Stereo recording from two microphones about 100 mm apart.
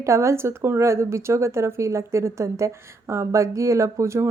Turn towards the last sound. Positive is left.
turn(degrees=-30)  # may be behind; listen again after turning